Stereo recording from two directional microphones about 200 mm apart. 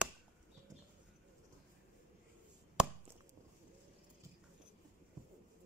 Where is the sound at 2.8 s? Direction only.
5° right (ahead or behind).